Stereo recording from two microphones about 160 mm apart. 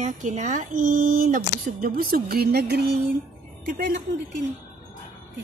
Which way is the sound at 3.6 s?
60° right (ahead or behind).